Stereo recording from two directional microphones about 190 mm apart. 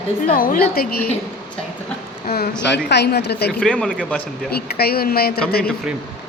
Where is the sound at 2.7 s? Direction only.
60° left (ahead or behind).